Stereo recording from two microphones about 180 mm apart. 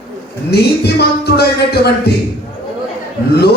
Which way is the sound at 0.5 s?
65° left (ahead or behind).